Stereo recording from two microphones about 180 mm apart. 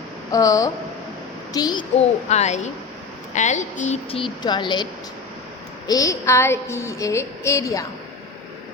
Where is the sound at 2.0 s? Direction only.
40° left (ahead or behind).